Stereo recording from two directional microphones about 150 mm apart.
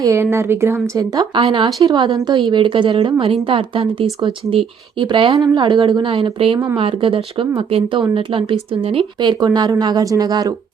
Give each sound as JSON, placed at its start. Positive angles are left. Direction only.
{"t": 0.0, "sound": "speech", "side_deg": -15}
{"t": 9.4, "sound": "speech", "side_deg": -25}